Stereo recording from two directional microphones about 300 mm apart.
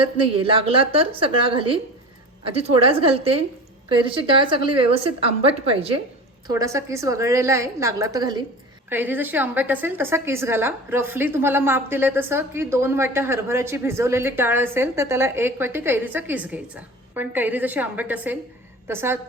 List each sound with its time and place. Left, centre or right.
0.0 s a woman's voice: centre